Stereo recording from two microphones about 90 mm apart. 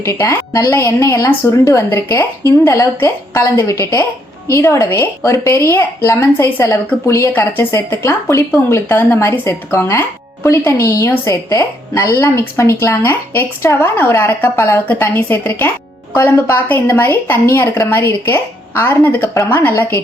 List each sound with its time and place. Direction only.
0.0 s speech: 35° left (ahead or behind)
7.3 s speech: 25° left (ahead or behind)